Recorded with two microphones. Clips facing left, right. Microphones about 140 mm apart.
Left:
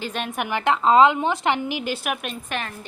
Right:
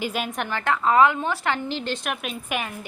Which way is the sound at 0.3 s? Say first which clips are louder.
Left 7 dB; 15° left (ahead or behind).